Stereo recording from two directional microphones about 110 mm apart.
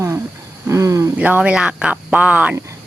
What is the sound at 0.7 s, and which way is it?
Speech, 30° right (ahead or behind).